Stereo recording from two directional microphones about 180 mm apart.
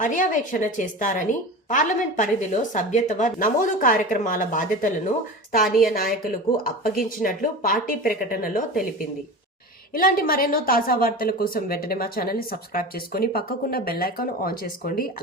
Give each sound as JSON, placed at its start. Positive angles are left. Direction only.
{"t": 0.0, "sound": "a woman's voice", "side_deg": 45}
{"t": 9.9, "sound": "speech", "side_deg": 55}